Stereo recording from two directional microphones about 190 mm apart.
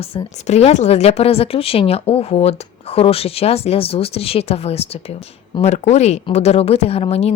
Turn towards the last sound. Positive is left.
turn(degrees=30)  # may be behind; listen again after turning